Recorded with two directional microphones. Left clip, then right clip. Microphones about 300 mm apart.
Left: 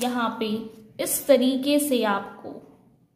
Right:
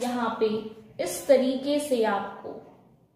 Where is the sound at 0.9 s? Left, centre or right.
Centre.